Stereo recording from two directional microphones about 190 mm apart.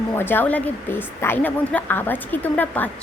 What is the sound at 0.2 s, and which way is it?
A woman's voice, 10° left (ahead or behind).